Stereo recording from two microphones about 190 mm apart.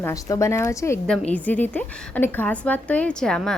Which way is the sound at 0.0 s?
15° left (ahead or behind).